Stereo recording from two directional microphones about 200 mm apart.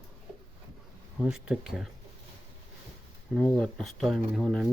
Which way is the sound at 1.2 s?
Centre (ahead or behind).